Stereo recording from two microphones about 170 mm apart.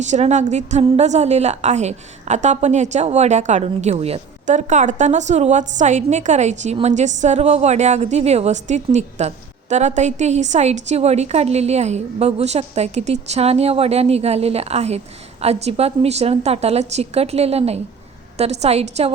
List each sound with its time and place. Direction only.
0.0 s a woman's voice: 40° right (ahead or behind)